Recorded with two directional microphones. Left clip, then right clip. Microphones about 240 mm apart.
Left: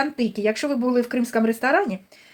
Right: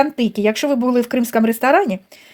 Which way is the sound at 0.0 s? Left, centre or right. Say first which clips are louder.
Right 6 dB; right.